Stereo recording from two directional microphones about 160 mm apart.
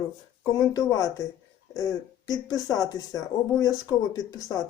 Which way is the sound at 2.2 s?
25° left (ahead or behind).